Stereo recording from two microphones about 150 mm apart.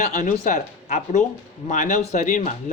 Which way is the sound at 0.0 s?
55° left (ahead or behind).